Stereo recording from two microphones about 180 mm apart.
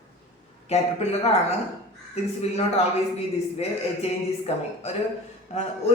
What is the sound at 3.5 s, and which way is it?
Speech, 35° left (ahead or behind).